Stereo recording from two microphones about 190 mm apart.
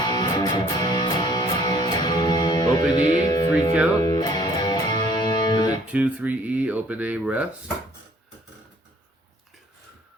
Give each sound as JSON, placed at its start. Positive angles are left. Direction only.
{"t": 0.0, "sound": "music", "side_deg": 20}
{"t": 5.9, "sound": "speech", "side_deg": -5}